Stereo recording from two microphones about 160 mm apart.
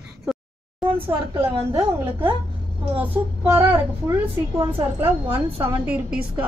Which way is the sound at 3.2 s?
25° right (ahead or behind).